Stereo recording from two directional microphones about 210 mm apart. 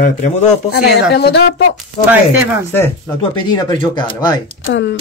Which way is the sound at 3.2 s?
20° left (ahead or behind).